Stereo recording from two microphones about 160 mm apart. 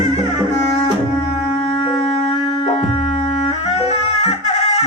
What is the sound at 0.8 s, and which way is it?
Music, 40° left (ahead or behind).